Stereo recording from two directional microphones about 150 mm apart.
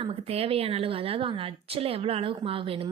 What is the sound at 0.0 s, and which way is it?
A woman's voice, 40° right (ahead or behind).